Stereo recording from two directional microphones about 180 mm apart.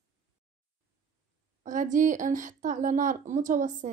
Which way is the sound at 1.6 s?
45° right (ahead or behind).